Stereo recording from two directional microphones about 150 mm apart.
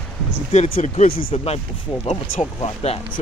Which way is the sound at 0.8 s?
50° left (ahead or behind).